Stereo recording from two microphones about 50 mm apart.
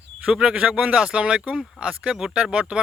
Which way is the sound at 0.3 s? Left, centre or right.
Centre.